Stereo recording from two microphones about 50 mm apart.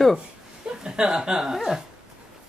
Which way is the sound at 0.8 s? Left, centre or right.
Centre.